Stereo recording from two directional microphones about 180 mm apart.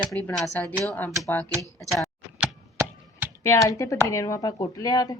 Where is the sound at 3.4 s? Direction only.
15° left (ahead or behind).